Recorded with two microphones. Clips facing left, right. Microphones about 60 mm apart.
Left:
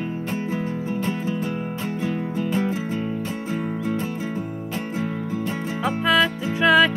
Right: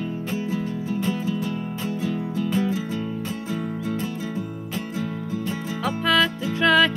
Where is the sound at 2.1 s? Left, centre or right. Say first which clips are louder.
Left 1 dB; left.